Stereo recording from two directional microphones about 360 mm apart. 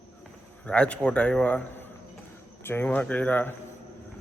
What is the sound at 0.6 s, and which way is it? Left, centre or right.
A man's voice, centre.